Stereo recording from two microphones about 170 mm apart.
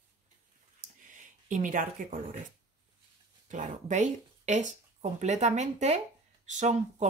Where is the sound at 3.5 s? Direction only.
45° right (ahead or behind).